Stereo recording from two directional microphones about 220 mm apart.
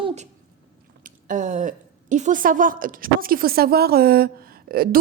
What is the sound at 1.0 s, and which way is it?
Speech, 35° right (ahead or behind).